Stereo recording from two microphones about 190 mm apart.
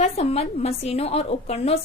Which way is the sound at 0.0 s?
35° left (ahead or behind).